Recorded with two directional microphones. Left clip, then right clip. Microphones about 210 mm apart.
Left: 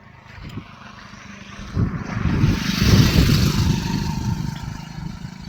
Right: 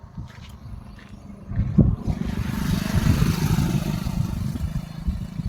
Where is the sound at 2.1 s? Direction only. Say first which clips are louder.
Left 7 dB; 20° right (ahead or behind); by 5.4 s 55° right (ahead or behind).